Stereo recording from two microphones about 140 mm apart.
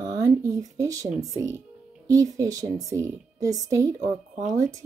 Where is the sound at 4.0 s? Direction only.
60° right (ahead or behind).